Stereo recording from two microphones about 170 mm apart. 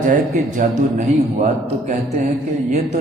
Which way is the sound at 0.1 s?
50° right (ahead or behind).